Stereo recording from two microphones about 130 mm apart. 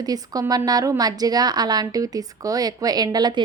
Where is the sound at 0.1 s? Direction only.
30° right (ahead or behind).